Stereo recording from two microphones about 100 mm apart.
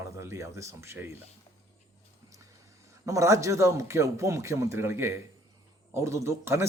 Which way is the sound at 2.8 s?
30° right (ahead or behind).